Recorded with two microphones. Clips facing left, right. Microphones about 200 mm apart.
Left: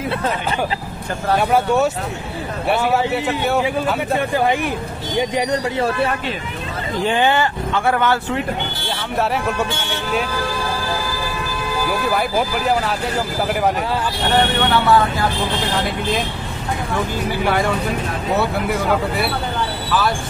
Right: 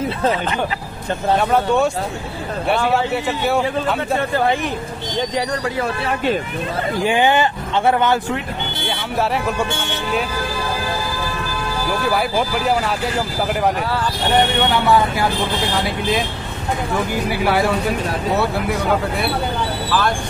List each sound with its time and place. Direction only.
1.5 s speech: 10° left (ahead or behind)
7.1 s speech: 15° right (ahead or behind)
11.9 s speech: centre (ahead or behind)
14.7 s speech: 15° right (ahead or behind)
15.8 s speech: centre (ahead or behind)